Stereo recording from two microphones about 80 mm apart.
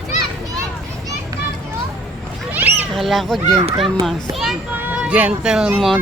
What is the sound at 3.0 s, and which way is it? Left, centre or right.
A child's voice, centre.